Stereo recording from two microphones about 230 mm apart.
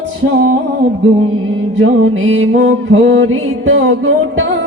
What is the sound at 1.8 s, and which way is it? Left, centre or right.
Music, right.